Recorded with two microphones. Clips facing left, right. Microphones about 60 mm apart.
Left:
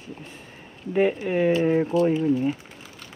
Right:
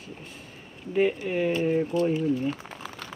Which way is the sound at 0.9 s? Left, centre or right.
Left.